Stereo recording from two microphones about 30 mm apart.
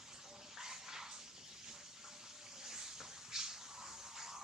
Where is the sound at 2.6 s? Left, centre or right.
Centre.